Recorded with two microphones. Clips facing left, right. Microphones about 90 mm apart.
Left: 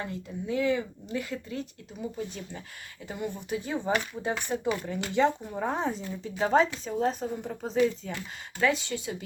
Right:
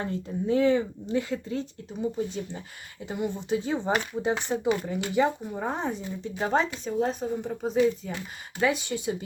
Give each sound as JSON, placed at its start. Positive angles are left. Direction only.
{"t": 0.0, "sound": "speech", "side_deg": -35}
{"t": 8.6, "sound": "speech", "side_deg": -20}